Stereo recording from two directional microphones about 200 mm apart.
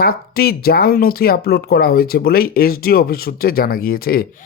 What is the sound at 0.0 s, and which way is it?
Speech, 50° left (ahead or behind).